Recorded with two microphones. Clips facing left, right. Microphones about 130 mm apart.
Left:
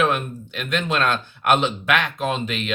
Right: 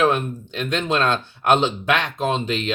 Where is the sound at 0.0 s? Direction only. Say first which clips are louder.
Right 2 dB; 30° right (ahead or behind).